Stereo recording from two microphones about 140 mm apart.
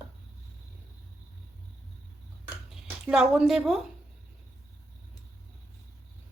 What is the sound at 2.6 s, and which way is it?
Speech, 5° right (ahead or behind).